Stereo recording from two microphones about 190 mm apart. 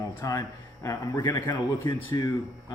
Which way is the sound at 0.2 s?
15° left (ahead or behind).